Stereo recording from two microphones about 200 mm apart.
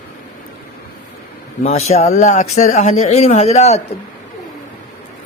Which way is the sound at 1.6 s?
35° left (ahead or behind).